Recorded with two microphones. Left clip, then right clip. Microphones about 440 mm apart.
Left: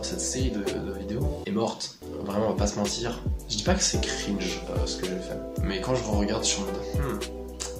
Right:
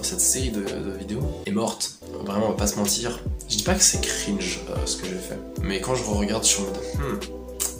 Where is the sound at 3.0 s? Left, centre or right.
Left.